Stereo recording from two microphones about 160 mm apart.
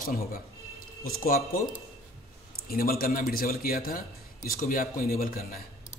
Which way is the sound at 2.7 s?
70° left (ahead or behind).